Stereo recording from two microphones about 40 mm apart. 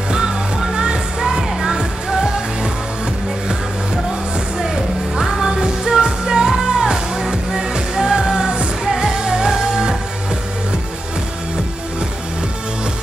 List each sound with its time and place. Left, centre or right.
0.1 s music: centre
4.6 s music: centre